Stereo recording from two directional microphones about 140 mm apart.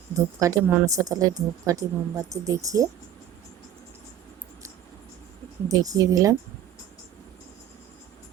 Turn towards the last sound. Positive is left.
turn(degrees=-25)  # may be behind; listen again after turning